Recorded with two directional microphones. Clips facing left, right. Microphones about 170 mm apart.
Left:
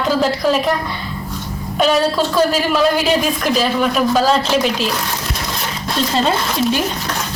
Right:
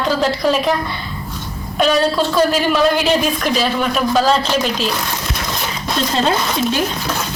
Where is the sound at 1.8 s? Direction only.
5° left (ahead or behind).